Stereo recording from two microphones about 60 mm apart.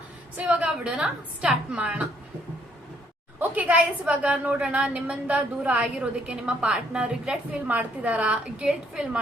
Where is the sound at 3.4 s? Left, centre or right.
Right.